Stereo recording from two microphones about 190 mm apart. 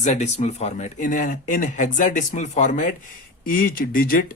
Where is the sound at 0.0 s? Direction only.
35° left (ahead or behind).